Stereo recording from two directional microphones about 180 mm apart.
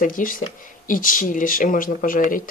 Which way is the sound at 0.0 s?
50° left (ahead or behind).